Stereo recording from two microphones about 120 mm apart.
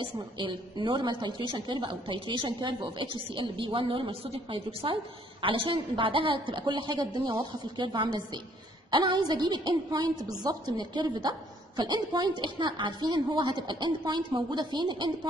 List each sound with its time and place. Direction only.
0.0 s a woman's voice: 40° right (ahead or behind)